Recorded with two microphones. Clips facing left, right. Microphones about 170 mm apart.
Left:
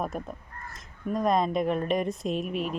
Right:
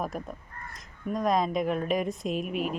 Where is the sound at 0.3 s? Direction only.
Centre (ahead or behind).